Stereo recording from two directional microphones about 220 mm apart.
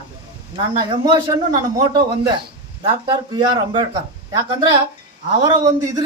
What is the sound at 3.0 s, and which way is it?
Speech, 20° right (ahead or behind).